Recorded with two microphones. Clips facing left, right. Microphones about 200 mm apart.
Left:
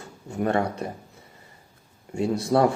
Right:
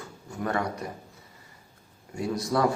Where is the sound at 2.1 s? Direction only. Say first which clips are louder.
Left 5 dB; 25° left (ahead or behind).